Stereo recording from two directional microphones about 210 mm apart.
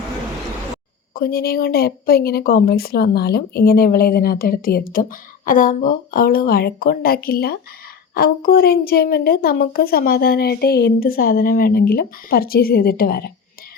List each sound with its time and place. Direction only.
1.1 s speech: 45° left (ahead or behind)